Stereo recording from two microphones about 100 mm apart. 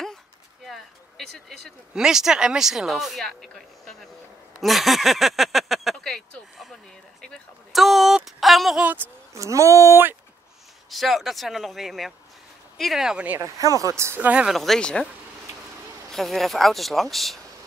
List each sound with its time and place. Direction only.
0.7 s speech: centre (ahead or behind)
9.3 s speech: 30° right (ahead or behind)
10.9 s speech: centre (ahead or behind)
13.4 s speech: 35° right (ahead or behind)
14.2 s speech: 10° right (ahead or behind)
14.5 s speech: centre (ahead or behind)
16.1 s speech: centre (ahead or behind)